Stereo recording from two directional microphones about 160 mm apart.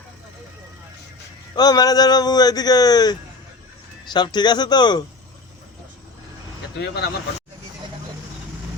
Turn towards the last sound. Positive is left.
turn(degrees=90)